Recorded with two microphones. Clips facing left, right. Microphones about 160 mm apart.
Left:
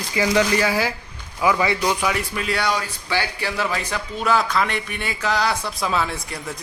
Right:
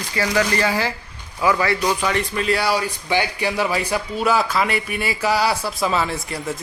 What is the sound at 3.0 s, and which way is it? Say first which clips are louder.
A man's voice: right 3 dB; 15° right (ahead or behind).